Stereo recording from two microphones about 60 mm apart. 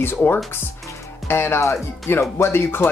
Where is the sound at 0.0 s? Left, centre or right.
Left.